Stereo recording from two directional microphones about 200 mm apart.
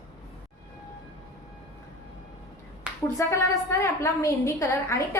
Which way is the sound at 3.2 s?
15° left (ahead or behind).